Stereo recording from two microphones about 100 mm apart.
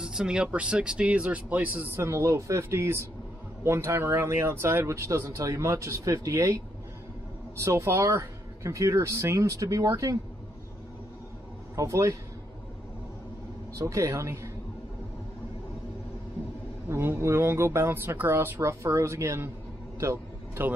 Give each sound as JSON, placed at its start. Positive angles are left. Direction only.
{"t": 0.0, "sound": "speech", "side_deg": -5}
{"t": 2.0, "sound": "speech", "side_deg": -30}
{"t": 7.6, "sound": "speech", "side_deg": -30}
{"t": 11.7, "sound": "speech", "side_deg": -30}
{"t": 13.7, "sound": "speech", "side_deg": -30}
{"t": 16.9, "sound": "speech", "side_deg": -25}
{"t": 20.0, "sound": "a sound", "side_deg": -30}